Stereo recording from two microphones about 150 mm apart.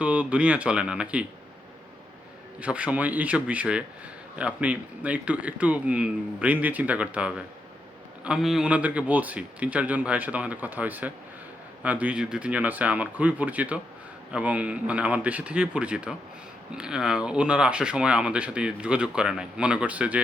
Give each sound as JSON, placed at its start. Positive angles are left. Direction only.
{"t": 0.0, "sound": "speech", "side_deg": -10}
{"t": 2.6, "sound": "speech", "side_deg": -10}